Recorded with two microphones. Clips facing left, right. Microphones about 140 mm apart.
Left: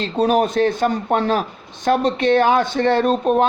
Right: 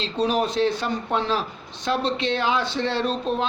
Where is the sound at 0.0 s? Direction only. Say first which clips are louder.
Left 6 dB; 50° left (ahead or behind).